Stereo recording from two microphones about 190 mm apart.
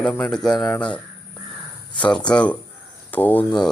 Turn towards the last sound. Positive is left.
turn(degrees=10)  # may be behind; listen again after turning